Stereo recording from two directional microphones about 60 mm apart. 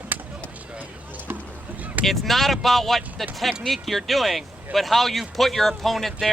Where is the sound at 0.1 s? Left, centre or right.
Right.